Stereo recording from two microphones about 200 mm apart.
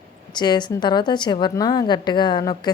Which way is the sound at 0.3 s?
20° left (ahead or behind).